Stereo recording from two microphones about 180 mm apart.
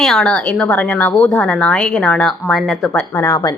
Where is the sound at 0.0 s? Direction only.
Centre (ahead or behind).